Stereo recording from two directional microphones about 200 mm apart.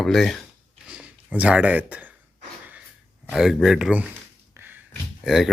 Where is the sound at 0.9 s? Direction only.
5° right (ahead or behind).